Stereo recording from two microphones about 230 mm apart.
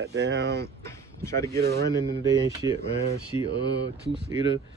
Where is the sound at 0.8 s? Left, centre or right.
Centre.